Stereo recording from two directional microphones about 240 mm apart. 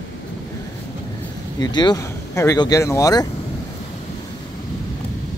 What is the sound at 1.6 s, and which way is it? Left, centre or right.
Speech, centre.